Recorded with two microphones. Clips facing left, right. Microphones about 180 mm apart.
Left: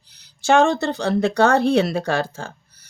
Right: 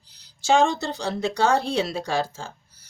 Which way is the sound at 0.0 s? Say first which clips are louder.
Left 7 dB; 60° left (ahead or behind).